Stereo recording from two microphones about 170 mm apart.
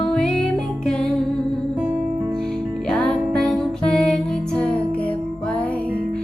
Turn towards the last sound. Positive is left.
turn(degrees=5)  # may be behind; listen again after turning